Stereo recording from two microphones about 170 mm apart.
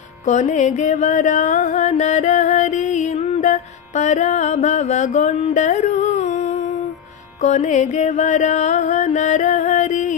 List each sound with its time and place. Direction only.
0.3 s music: 45° left (ahead or behind)